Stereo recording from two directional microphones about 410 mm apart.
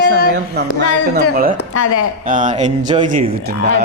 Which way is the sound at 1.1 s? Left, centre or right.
Right.